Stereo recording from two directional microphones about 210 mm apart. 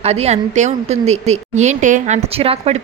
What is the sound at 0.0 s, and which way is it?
A woman's voice, 30° right (ahead or behind).